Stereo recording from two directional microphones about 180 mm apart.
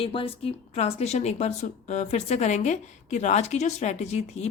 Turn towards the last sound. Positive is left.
turn(degrees=35)  # may be behind; listen again after turning